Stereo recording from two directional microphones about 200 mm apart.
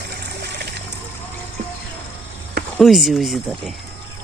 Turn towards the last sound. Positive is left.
turn(degrees=0)  # may be behind; listen again after turning